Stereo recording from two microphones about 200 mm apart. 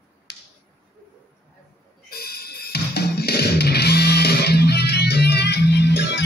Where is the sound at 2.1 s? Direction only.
50° left (ahead or behind).